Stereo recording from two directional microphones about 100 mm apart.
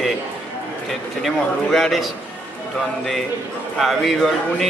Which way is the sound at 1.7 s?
5° left (ahead or behind).